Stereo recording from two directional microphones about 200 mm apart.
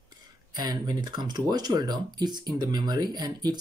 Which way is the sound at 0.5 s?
20° right (ahead or behind).